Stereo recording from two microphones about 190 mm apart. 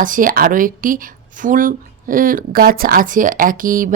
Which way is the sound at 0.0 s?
45° right (ahead or behind).